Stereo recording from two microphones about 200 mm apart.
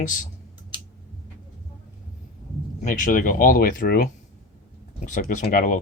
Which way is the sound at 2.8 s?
40° left (ahead or behind).